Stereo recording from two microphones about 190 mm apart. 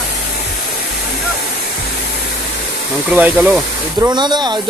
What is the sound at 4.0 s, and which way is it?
Speech, 25° right (ahead or behind).